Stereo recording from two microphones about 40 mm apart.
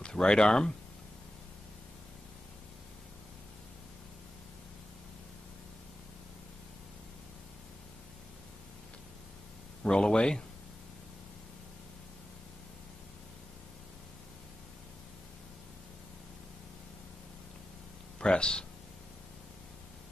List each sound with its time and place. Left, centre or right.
0.1 s speech: left
9.8 s speech: centre
18.2 s speech: left